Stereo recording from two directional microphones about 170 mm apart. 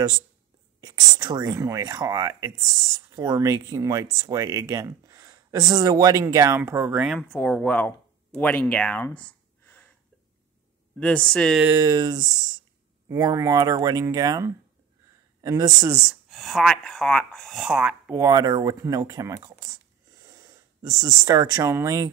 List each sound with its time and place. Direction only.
0.7 s speech: 25° right (ahead or behind)
7.2 s speech: 5° left (ahead or behind)
11.0 s speech: 5° left (ahead or behind)
11.6 s speech: 20° right (ahead or behind)
16.0 s speech: centre (ahead or behind)
18.2 s speech: 25° right (ahead or behind)